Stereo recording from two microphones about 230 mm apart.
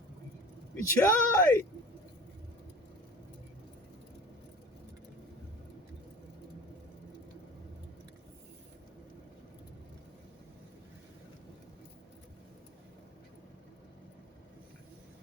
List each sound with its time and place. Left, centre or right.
0.8 s speech: centre